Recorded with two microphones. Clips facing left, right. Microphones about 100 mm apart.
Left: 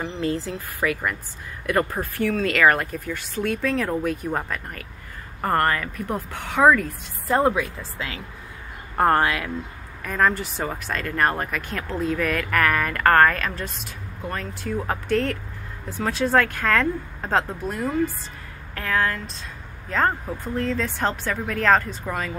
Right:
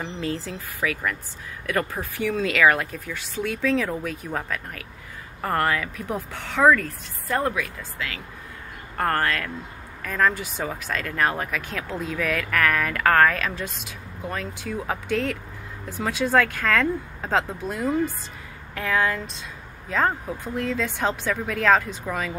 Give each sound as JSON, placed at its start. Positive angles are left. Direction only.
{"t": 0.2, "sound": "speech", "side_deg": 0}
{"t": 7.2, "sound": "a woman's voice", "side_deg": 25}